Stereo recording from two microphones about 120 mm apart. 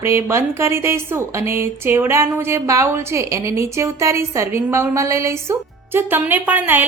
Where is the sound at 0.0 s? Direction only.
25° right (ahead or behind).